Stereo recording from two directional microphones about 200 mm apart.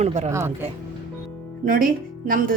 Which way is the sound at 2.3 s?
45° right (ahead or behind).